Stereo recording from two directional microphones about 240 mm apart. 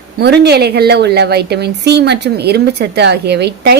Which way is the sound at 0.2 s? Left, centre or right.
Right.